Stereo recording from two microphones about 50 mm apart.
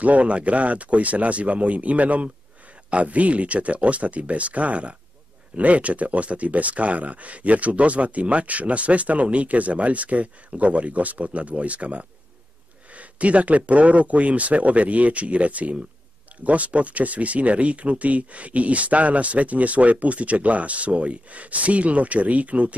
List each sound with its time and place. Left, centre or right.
0.0 s speech: right